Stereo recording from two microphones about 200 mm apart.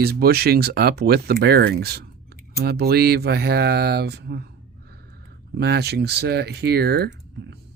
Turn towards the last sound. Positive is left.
turn(degrees=-55)  # may be behind; listen again after turning